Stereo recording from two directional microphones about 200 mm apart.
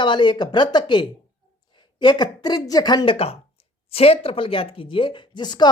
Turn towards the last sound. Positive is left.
turn(degrees=20)  # may be behind; listen again after turning